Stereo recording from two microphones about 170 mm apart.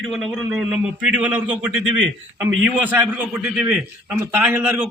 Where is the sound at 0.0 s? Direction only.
Centre (ahead or behind).